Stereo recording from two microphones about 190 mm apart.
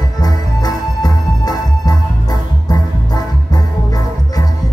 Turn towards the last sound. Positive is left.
turn(degrees=20)  # may be behind; listen again after turning